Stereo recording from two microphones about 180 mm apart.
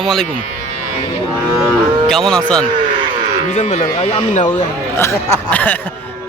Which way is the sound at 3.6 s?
40° left (ahead or behind).